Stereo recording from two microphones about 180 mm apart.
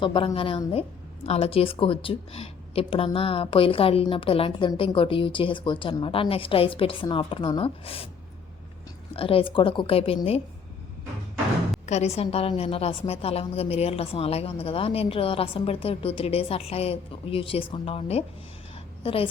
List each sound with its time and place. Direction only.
0.0 s a woman's voice: 30° left (ahead or behind)
9.1 s a woman's voice: 30° left (ahead or behind)
11.9 s a woman's voice: 35° left (ahead or behind)